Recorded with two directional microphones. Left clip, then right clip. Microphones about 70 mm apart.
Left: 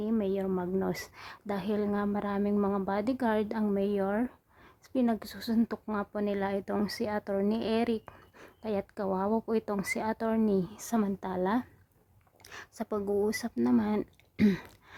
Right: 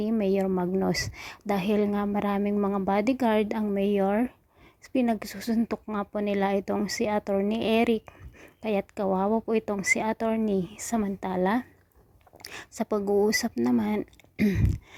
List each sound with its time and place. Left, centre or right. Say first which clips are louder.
0.2 s a woman's voice: right 6 dB; right
2.6 s speech: right 3 dB; centre
2.8 s a woman's voice: right 6 dB; right
8.6 s speech: right 5 dB; right
12.4 s speech: right 6 dB; right
12.8 s a woman's voice: right 6 dB; right
13.7 s speech: right 2 dB; right
14.0 s speech: right 1 dB; centre